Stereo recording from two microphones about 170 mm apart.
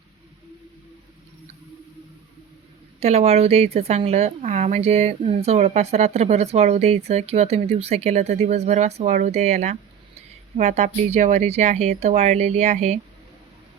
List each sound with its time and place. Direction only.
3.0 s a woman's voice: 40° right (ahead or behind)